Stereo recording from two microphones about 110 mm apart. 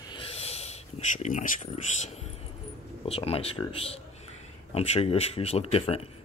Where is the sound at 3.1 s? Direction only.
65° left (ahead or behind).